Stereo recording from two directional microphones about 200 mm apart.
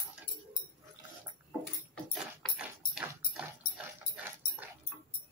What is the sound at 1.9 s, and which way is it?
Dog, centre (ahead or behind).